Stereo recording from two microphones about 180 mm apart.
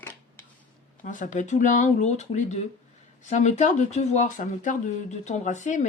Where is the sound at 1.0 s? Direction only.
45° left (ahead or behind).